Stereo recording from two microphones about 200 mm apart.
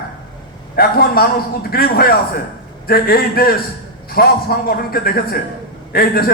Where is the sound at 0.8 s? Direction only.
50° left (ahead or behind).